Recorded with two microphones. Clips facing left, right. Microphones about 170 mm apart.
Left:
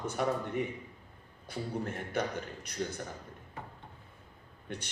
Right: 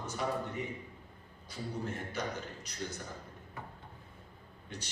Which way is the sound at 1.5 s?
55° left (ahead or behind).